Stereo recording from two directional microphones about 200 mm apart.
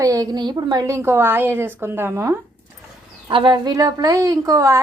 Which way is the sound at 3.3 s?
25° right (ahead or behind).